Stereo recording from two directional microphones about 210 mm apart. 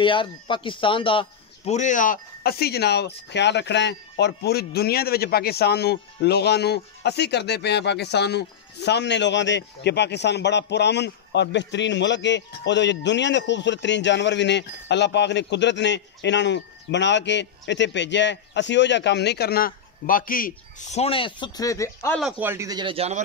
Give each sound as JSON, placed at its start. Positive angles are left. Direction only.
{"t": 0.0, "sound": "speech", "side_deg": 25}
{"t": 1.7, "sound": "speech", "side_deg": 35}
{"t": 21.0, "sound": "speech", "side_deg": 25}
{"t": 22.2, "sound": "a man's voice", "side_deg": -10}